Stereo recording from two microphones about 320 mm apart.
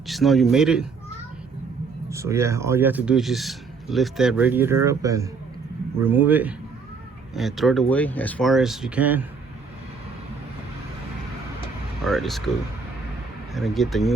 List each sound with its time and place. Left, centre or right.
0.1 s speech: centre
2.0 s speech: centre
12.0 s speech: centre
13.5 s speech: centre